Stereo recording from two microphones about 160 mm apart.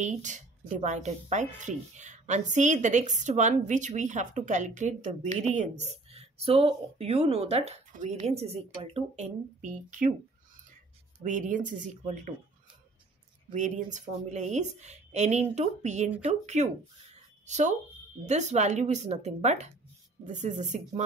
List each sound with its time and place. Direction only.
0.0 s speech: 50° right (ahead or behind)
11.2 s speech: 55° right (ahead or behind)
13.5 s speech: 50° right (ahead or behind)